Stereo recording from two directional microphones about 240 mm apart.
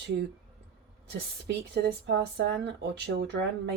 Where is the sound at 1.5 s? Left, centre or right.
Right.